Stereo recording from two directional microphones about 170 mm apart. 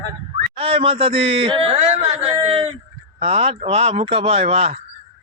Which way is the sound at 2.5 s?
35° right (ahead or behind).